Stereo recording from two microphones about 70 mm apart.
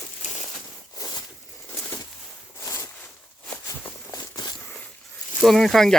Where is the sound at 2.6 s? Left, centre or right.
Left.